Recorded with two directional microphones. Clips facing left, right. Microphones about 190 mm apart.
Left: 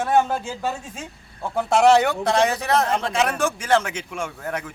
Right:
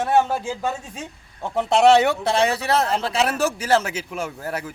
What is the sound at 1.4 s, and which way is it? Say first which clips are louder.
Speech: right 1 dB; 25° right (ahead or behind).